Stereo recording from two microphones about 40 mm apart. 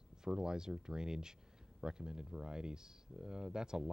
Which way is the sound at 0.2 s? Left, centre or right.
Centre.